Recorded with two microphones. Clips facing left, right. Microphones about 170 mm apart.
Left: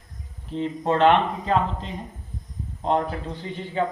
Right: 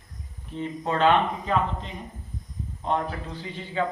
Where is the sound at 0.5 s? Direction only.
30° left (ahead or behind).